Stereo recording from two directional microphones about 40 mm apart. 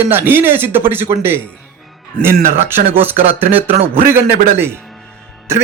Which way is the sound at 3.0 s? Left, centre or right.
Right.